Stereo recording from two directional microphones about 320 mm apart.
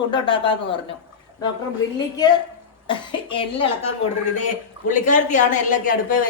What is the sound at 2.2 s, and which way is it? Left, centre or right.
A woman's voice, centre.